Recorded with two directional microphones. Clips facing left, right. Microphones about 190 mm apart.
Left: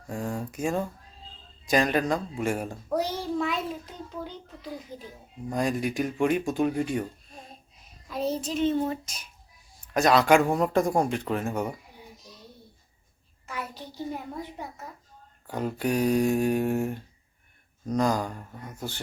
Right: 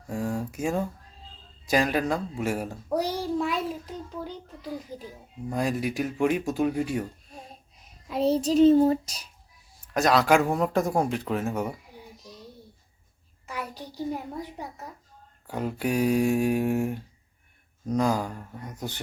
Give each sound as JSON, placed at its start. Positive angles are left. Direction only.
{"t": 0.1, "sound": "a child's voice", "side_deg": -5}
{"t": 8.0, "sound": "child singing", "side_deg": -25}
{"t": 9.8, "sound": "a child's voice", "side_deg": 0}
{"t": 13.5, "sound": "speech", "side_deg": -10}
{"t": 15.4, "sound": "speech", "side_deg": -5}